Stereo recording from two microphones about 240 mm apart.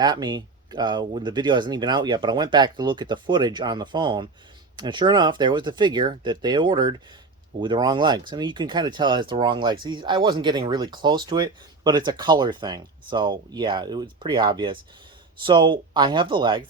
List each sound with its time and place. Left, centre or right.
0.0 s speech: centre